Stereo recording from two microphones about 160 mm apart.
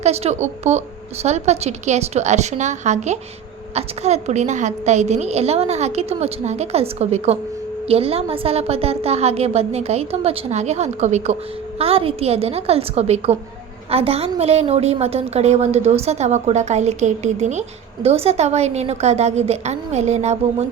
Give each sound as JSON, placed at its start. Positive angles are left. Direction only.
{"t": 0.0, "sound": "a woman's voice", "side_deg": -40}